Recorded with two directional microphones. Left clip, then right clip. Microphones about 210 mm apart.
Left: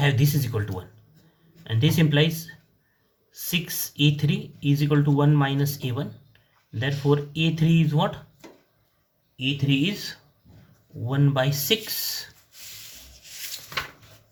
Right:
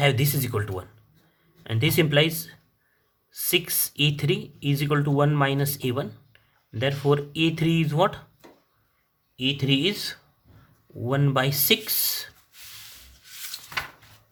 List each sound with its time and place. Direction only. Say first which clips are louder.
0.0 s speech: right 2 dB; 45° right (ahead or behind)
3.5 s speech: right 4 dB; 45° right (ahead or behind)
9.6 s speech: right 2 dB; 50° right (ahead or behind)